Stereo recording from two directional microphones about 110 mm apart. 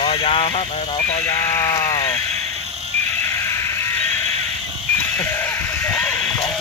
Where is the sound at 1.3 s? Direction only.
25° left (ahead or behind).